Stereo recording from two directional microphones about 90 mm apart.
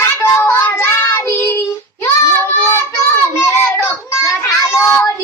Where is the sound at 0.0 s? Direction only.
25° left (ahead or behind).